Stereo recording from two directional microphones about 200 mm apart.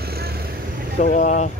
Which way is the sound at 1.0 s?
40° left (ahead or behind).